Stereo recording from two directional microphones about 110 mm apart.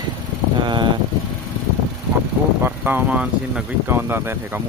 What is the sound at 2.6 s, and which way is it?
Speech, 15° right (ahead or behind).